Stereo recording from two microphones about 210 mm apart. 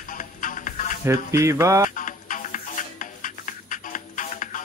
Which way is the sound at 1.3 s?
15° right (ahead or behind).